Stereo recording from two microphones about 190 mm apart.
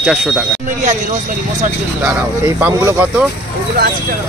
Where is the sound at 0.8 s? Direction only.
40° right (ahead or behind).